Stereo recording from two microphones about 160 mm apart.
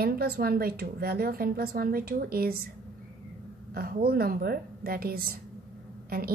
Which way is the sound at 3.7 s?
70° right (ahead or behind).